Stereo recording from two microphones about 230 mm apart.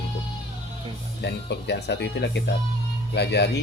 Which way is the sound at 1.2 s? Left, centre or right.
Left.